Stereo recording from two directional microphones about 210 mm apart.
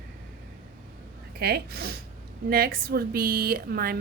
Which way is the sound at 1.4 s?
45° right (ahead or behind).